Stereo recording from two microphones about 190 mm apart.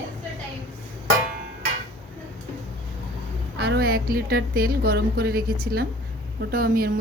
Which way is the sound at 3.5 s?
60° right (ahead or behind).